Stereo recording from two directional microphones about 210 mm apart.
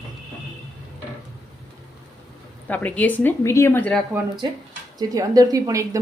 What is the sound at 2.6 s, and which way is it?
A woman's voice, 5° left (ahead or behind).